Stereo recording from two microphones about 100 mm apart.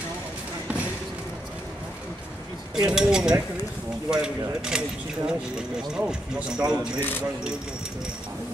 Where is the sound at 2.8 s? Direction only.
10° right (ahead or behind).